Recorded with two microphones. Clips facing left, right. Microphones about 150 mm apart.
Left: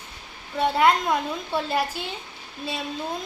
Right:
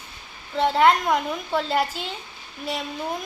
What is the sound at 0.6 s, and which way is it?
A child's voice, 20° right (ahead or behind).